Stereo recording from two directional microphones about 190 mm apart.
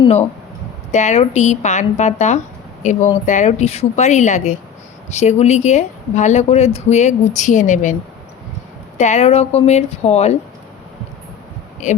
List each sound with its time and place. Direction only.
0.9 s speech: 40° left (ahead or behind)
9.0 s speech: 35° left (ahead or behind)
11.8 s speech: 40° left (ahead or behind)